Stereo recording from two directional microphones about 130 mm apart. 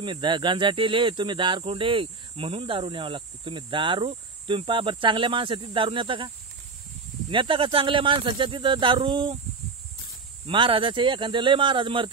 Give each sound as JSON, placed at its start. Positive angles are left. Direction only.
{"t": 0.0, "sound": "speech", "side_deg": -40}
{"t": 10.4, "sound": "speech", "side_deg": -40}